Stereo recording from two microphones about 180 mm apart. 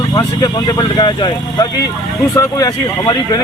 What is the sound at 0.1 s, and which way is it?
Speech, 20° left (ahead or behind).